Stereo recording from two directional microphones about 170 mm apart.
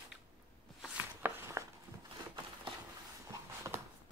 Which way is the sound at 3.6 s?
20° right (ahead or behind).